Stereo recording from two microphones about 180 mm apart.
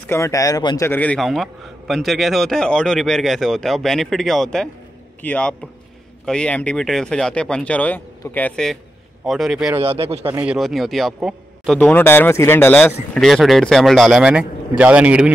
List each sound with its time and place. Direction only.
0.1 s a man's voice: 15° left (ahead or behind); by 9.8 s centre (ahead or behind)
9.8 s speech: 30° right (ahead or behind)
10.2 s a man's voice: 10° right (ahead or behind)